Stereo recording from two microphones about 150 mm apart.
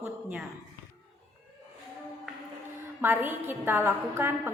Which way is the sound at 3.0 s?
15° right (ahead or behind).